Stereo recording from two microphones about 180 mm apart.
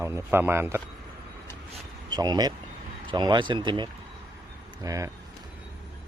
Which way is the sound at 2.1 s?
20° right (ahead or behind).